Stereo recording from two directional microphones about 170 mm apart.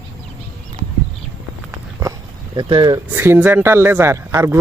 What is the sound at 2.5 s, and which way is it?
Speech, 25° right (ahead or behind).